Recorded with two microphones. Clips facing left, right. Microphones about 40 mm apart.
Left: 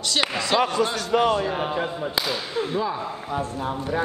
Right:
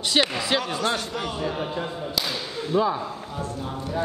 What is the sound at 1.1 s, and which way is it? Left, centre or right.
Speech, left.